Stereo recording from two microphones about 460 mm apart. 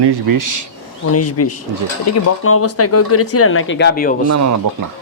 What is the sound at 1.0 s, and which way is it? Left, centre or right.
Speech, left.